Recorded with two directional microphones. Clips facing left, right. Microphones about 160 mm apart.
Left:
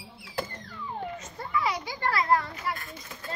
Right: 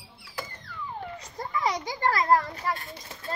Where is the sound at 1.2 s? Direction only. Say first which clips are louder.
Right 2 dB; 40° right (ahead or behind).